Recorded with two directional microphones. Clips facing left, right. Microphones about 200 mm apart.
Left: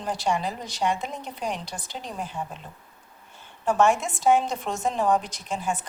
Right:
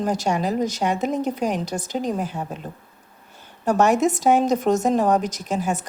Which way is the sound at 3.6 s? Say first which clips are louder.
Right 4 dB; 40° right (ahead or behind).